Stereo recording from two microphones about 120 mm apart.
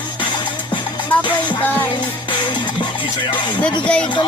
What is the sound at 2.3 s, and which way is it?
Music, 40° left (ahead or behind).